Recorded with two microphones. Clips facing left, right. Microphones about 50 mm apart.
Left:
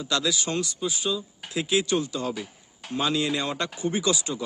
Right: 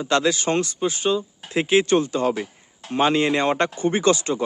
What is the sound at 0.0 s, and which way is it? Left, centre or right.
Speech, right.